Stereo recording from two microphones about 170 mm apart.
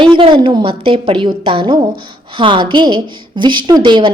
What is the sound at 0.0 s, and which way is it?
A woman's voice, 30° right (ahead or behind).